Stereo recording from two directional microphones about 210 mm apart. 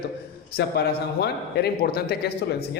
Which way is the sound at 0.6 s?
50° left (ahead or behind).